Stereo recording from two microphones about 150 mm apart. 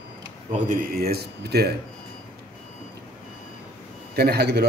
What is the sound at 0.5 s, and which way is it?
A man's voice, 75° right (ahead or behind).